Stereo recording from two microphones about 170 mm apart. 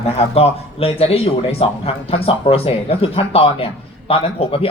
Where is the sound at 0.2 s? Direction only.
35° left (ahead or behind).